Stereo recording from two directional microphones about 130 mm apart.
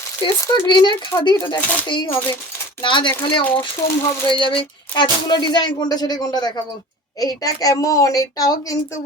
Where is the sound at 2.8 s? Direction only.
40° left (ahead or behind).